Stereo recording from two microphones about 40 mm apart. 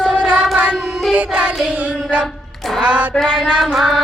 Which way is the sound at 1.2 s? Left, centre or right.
Right.